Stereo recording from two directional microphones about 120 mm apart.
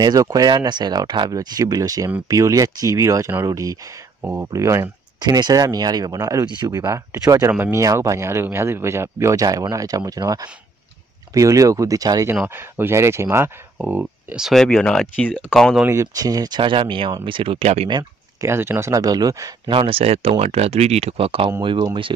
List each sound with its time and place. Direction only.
0.0 s speech: 35° right (ahead or behind)
7.5 s speech: 15° right (ahead or behind)
7.8 s speech: 25° right (ahead or behind)
12.4 s speech: 20° right (ahead or behind)
14.4 s speech: 5° left (ahead or behind)
15.8 s speech: 25° right (ahead or behind); by 17.8 s 55° right (ahead or behind)
18.4 s speech: 20° right (ahead or behind)
19.7 s speech: 50° right (ahead or behind)